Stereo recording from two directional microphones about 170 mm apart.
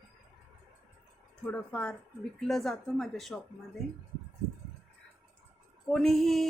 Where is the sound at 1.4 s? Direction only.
5° left (ahead or behind).